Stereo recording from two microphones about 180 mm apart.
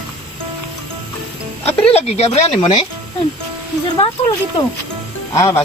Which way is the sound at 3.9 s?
30° left (ahead or behind).